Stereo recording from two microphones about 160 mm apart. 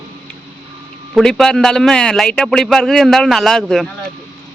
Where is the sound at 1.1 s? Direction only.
5° left (ahead or behind).